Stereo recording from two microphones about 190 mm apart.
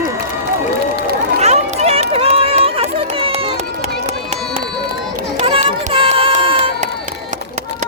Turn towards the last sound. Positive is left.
turn(degrees=-30)  # may be behind; listen again after turning